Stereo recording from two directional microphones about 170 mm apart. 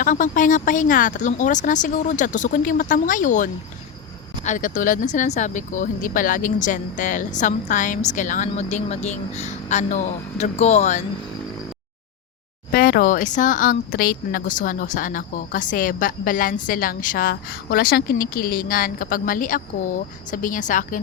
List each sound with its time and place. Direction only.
0.0 s speech: 50° left (ahead or behind)
12.7 s speech: 60° left (ahead or behind)